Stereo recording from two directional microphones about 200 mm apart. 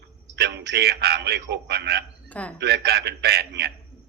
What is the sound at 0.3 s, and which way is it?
A man's voice, 55° right (ahead or behind).